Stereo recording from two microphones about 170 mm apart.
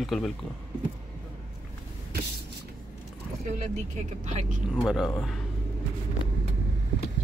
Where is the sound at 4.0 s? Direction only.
45° right (ahead or behind).